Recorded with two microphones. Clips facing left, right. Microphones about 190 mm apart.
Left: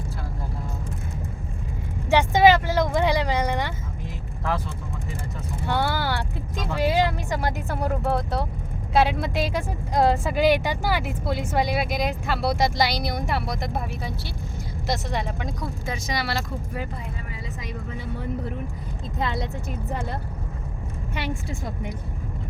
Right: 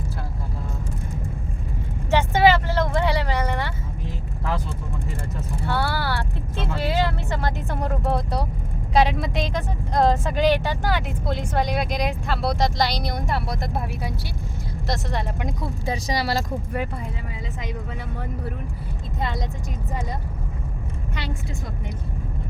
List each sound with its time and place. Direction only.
2.0 s vehicle: 15° left (ahead or behind)
5.6 s vehicle: 20° left (ahead or behind); by 8.4 s centre (ahead or behind)
8.9 s speech: centre (ahead or behind)
15.6 s speech: 35° right (ahead or behind)